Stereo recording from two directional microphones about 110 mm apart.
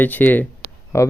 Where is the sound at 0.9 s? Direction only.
25° left (ahead or behind).